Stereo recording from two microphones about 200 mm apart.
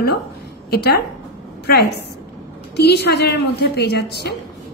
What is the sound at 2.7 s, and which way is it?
A woman's voice, 55° left (ahead or behind).